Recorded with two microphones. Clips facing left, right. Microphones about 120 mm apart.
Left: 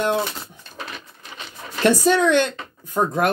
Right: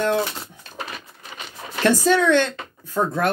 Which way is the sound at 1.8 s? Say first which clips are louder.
Left 1 dB; 15° left (ahead or behind).